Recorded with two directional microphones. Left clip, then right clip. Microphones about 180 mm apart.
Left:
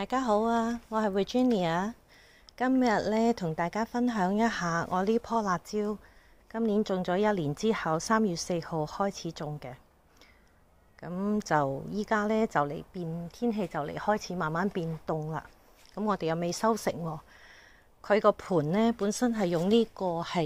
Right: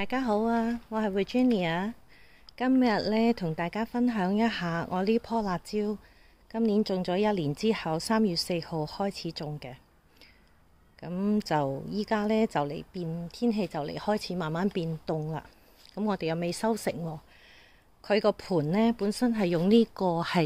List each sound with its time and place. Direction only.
0.0 s speech: 10° right (ahead or behind)
11.0 s speech: 20° right (ahead or behind)
19.3 s speech: 20° right (ahead or behind)